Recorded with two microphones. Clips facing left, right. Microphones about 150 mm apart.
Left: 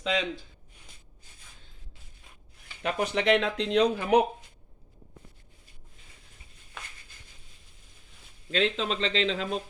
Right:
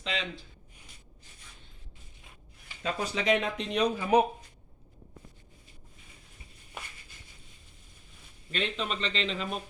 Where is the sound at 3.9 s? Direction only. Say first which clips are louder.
Left 1 dB; 70° left (ahead or behind).